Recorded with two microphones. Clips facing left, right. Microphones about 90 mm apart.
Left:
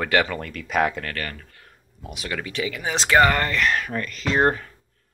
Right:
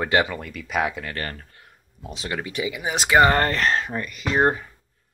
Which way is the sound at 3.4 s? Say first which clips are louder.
Right 1 dB; 35° right (ahead or behind).